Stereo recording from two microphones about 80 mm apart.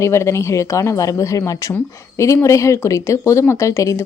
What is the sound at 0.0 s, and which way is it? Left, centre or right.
A woman's voice, left.